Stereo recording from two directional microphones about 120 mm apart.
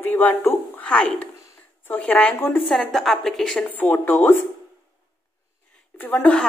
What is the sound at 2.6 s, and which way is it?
A woman's voice, centre (ahead or behind).